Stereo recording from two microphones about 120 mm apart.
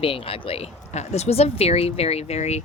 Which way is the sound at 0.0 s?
50° left (ahead or behind).